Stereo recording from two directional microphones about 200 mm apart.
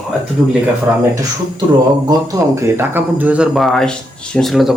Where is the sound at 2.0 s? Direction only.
15° right (ahead or behind).